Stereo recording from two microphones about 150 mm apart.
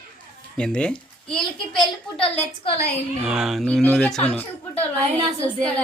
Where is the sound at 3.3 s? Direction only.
5° right (ahead or behind).